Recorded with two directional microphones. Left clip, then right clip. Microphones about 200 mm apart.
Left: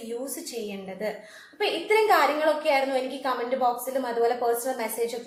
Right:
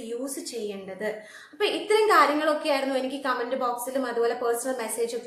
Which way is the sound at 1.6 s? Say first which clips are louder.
Even; 15° right (ahead or behind).